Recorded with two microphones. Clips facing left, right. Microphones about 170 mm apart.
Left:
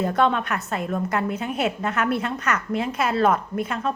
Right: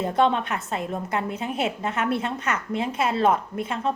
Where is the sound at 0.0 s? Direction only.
25° right (ahead or behind).